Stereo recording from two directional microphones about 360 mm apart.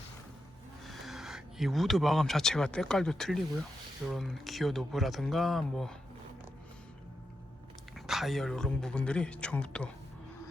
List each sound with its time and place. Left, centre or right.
0.9 s speech: centre
7.9 s speech: centre